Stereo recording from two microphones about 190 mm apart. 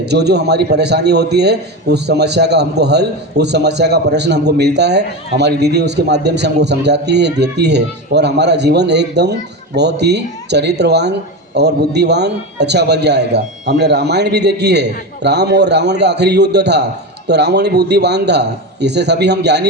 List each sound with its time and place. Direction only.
0.0 s a man's voice: 60° right (ahead or behind)